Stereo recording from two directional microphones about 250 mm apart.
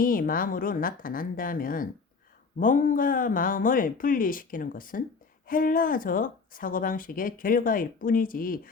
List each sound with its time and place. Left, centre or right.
0.0 s speech: left